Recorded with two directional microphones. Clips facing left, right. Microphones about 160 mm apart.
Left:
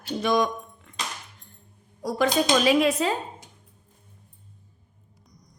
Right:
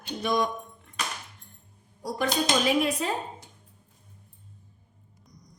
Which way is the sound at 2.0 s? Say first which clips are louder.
Left 4 dB; 90° left.